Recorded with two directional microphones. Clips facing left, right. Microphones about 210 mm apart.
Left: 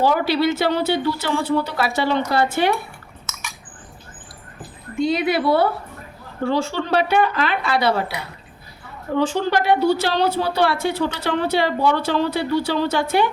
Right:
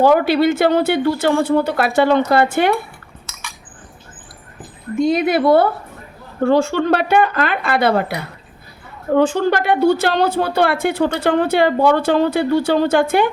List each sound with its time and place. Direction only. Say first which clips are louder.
0.0 s a woman's voice: right 5 dB; 50° right (ahead or behind)
4.9 s a woman's voice: right 4 dB; 50° right (ahead or behind)